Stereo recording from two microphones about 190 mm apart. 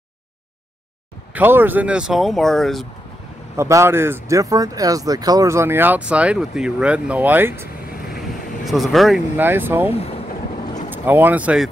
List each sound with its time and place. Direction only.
1.3 s speech: 10° right (ahead or behind)
3.5 s speech: 15° right (ahead or behind)
8.2 s vehicle: centre (ahead or behind)
9.4 s speech: 10° right (ahead or behind)
9.9 s speech: 30° left (ahead or behind)
10.9 s speech: 10° right (ahead or behind)